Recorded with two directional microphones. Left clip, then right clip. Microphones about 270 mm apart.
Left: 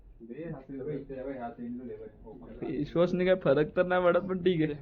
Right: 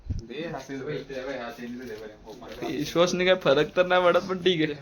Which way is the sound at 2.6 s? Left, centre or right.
Centre.